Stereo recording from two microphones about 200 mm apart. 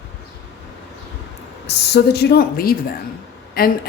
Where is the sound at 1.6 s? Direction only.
55° left (ahead or behind).